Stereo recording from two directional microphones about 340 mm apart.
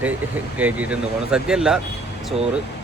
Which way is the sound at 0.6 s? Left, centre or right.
Centre.